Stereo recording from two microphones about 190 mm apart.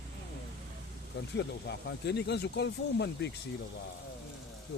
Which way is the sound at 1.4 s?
65° left (ahead or behind).